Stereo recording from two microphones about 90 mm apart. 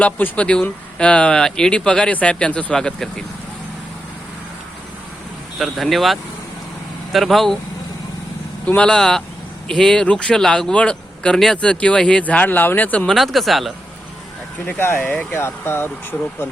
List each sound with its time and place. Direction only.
0.0 s a man's voice: 15° left (ahead or behind)
5.5 s speech: centre (ahead or behind)
8.6 s a man's voice: 15° left (ahead or behind)
13.1 s speech: centre (ahead or behind)
14.8 s speech: 25° left (ahead or behind)
15.4 s speech: 25° left (ahead or behind)